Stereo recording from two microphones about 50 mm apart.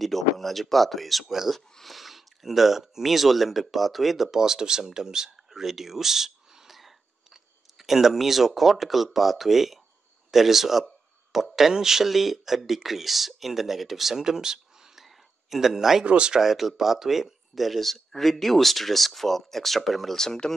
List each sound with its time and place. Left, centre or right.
0.0 s speech: centre
16.3 s speech: centre